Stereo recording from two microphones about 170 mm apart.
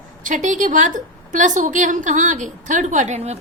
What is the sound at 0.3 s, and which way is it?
A woman's voice, 50° right (ahead or behind).